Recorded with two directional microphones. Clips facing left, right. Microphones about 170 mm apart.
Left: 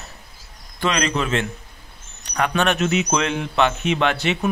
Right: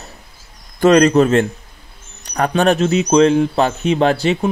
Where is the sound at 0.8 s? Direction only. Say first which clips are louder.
Right 12 dB; 45° right (ahead or behind).